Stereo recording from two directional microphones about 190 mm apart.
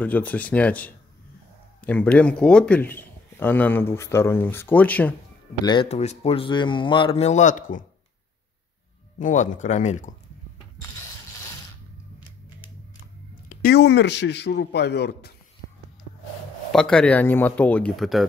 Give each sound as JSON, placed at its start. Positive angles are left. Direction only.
{"t": 0.0, "sound": "a man's voice", "side_deg": 10}
{"t": 5.7, "sound": "speech", "side_deg": 30}
{"t": 9.2, "sound": "speech", "side_deg": 40}
{"t": 13.5, "sound": "speech", "side_deg": 55}
{"t": 16.7, "sound": "a man's voice", "side_deg": 5}